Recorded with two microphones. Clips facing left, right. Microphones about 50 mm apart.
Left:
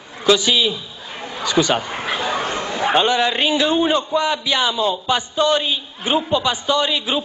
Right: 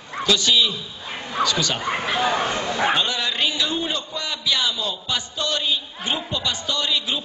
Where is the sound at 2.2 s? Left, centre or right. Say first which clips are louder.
Right 1 dB; centre.